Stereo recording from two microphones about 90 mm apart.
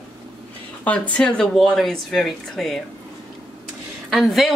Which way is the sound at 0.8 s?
15° left (ahead or behind).